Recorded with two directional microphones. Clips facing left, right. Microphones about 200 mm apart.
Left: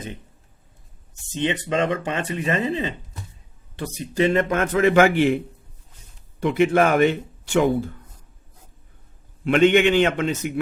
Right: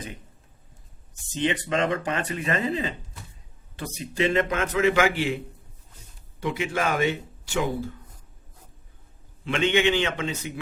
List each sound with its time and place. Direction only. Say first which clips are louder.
1.4 s a man's voice: left 2 dB; 25° left (ahead or behind); by 5.4 s 55° left (ahead or behind)
6.4 s speech: left 9 dB; 60° left (ahead or behind)
9.4 s speech: left 7 dB; 55° left (ahead or behind)